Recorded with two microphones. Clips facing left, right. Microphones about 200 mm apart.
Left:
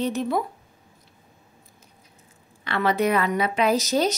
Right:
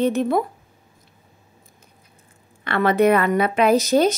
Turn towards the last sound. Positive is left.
turn(degrees=-55)  # may be behind; listen again after turning